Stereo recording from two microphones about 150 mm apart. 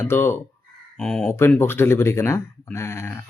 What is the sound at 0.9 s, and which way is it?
Speech, 5° left (ahead or behind).